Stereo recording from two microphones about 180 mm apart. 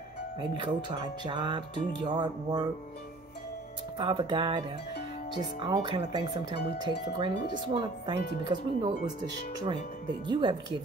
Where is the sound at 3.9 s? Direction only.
25° right (ahead or behind).